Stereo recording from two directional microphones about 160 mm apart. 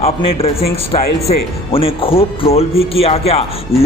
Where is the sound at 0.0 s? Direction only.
40° left (ahead or behind).